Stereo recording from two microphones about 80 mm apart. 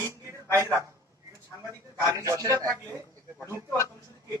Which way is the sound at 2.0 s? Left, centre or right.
Right.